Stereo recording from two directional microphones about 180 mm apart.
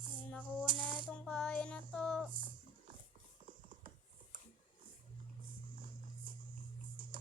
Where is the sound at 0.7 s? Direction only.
10° left (ahead or behind).